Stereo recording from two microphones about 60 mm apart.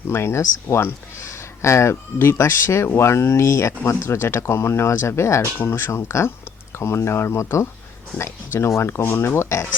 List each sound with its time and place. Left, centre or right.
0.1 s speech: left
5.5 s speech: left